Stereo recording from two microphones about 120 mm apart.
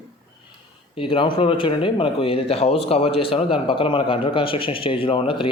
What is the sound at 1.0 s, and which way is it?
Speech, 45° left (ahead or behind).